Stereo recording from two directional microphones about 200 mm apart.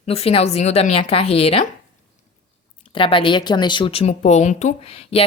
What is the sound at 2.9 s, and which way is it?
Speech, 25° left (ahead or behind).